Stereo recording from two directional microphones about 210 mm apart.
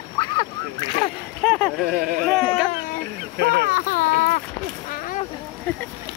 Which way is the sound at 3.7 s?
40° left (ahead or behind).